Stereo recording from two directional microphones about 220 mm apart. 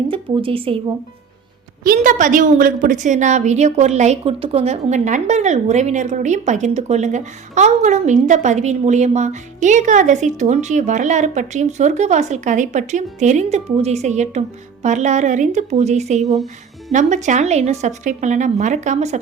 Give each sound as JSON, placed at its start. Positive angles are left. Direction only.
{"t": 0.1, "sound": "a woman's voice", "side_deg": -25}
{"t": 1.8, "sound": "a woman's voice", "side_deg": -40}